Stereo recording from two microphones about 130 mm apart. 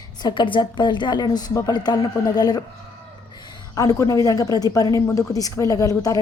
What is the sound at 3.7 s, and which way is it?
A woman's voice, 25° left (ahead or behind).